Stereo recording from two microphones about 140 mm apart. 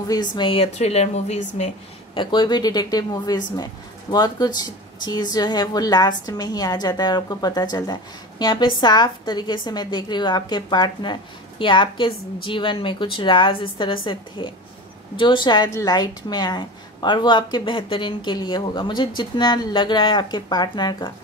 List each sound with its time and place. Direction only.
0.1 s a woman's voice: 30° left (ahead or behind); by 1.7 s 55° left (ahead or behind)
2.1 s a woman's voice: 35° left (ahead or behind)